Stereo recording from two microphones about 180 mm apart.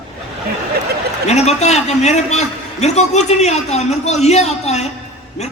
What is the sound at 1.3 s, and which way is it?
A man's voice, 35° left (ahead or behind).